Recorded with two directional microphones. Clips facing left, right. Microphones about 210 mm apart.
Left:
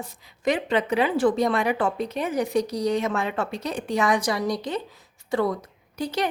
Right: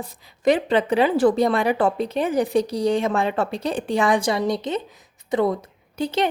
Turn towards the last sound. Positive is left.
turn(degrees=-25)  # may be behind; listen again after turning